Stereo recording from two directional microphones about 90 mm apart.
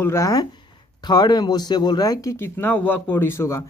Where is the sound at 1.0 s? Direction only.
50° left (ahead or behind).